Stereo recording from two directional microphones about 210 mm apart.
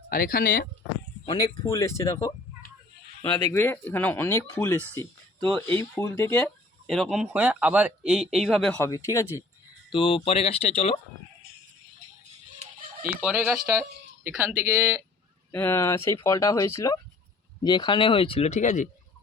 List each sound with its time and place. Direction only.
0.1 s speech: 45° left (ahead or behind)
1.2 s speech: 20° left (ahead or behind)
3.2 s speech: 15° left (ahead or behind)
9.9 s speech: 25° left (ahead or behind)
13.1 s speech: 5° right (ahead or behind)
15.5 s speech: 10° left (ahead or behind); by 18.9 s 35° left (ahead or behind)